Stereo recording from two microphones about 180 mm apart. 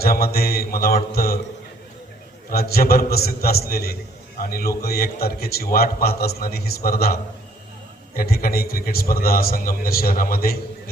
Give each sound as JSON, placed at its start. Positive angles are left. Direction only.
{"t": 0.0, "sound": "a man's voice", "side_deg": 60}
{"t": 2.5, "sound": "a man's voice", "side_deg": 60}